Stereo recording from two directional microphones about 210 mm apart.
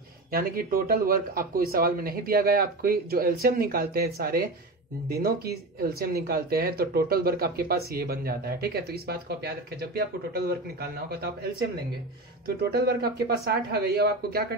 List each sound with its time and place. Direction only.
0.3 s speech: 45° right (ahead or behind)
12.4 s speech: 50° right (ahead or behind)